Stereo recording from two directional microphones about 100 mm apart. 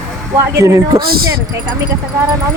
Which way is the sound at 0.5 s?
30° right (ahead or behind).